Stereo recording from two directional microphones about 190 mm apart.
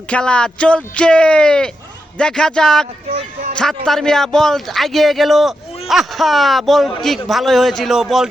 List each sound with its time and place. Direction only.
0.1 s speech: 5° left (ahead or behind)
3.1 s a sound: 35° right (ahead or behind)
3.6 s speech: centre (ahead or behind)